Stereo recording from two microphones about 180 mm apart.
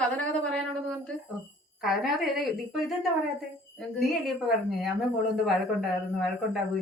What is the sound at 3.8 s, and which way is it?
A woman's voice, centre (ahead or behind).